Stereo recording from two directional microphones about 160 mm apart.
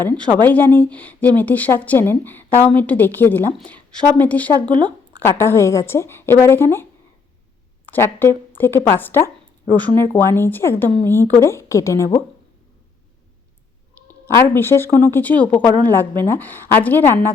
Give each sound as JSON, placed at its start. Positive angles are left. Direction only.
{"t": 0.4, "sound": "speech", "side_deg": 10}
{"t": 7.9, "sound": "speech", "side_deg": 15}
{"t": 14.1, "sound": "speech", "side_deg": 15}